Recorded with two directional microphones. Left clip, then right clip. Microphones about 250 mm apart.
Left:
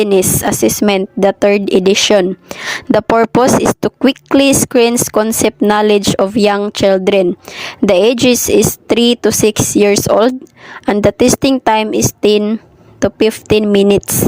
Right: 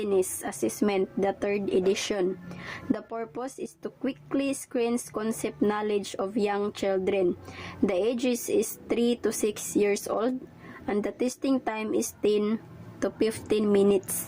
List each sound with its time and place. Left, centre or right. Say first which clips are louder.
0.0 s speech: left 16 dB; left